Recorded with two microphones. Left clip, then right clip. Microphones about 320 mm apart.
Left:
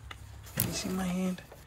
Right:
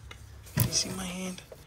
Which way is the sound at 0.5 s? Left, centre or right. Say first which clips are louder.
Right 4 dB; centre.